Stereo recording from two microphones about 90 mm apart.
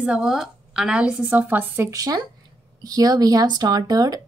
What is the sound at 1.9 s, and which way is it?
A woman's voice, 45° right (ahead or behind).